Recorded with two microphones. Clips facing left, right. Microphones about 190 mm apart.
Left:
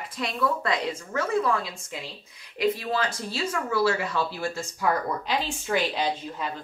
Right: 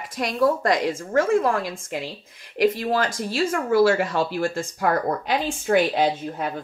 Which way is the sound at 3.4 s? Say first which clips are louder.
Right 6 dB; 50° right (ahead or behind).